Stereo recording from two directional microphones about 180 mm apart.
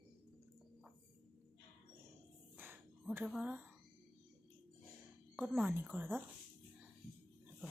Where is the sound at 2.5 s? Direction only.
10° right (ahead or behind).